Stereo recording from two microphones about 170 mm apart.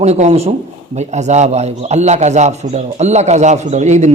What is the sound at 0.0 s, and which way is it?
A man's voice, 40° right (ahead or behind).